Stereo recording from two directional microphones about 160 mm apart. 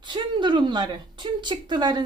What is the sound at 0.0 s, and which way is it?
A woman's voice, 30° right (ahead or behind).